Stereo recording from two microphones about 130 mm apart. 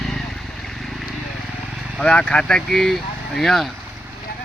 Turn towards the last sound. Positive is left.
turn(degrees=0)  # may be behind; listen again after turning